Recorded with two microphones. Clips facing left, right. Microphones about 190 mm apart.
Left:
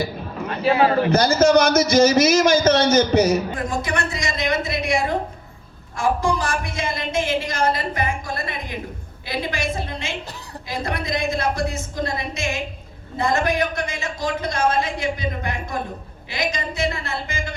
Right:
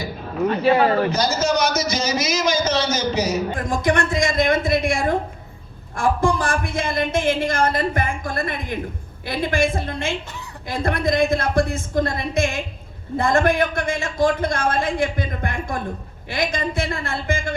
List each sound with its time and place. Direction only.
1.1 s a man's voice: 55° left (ahead or behind)
3.6 s a woman's voice: 50° right (ahead or behind)